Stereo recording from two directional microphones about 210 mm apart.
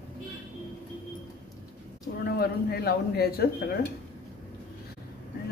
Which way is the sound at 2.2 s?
50° left (ahead or behind).